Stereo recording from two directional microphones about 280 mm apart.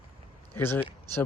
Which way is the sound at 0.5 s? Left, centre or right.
Centre.